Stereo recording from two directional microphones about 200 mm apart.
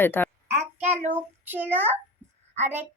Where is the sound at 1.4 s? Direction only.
10° right (ahead or behind).